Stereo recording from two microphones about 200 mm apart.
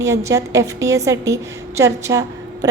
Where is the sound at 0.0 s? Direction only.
15° right (ahead or behind).